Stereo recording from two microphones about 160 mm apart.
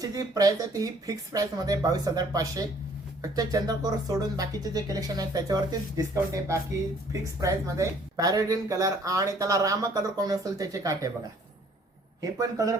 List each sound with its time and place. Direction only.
0.0 s speech: 20° right (ahead or behind)
12.2 s speech: 20° right (ahead or behind)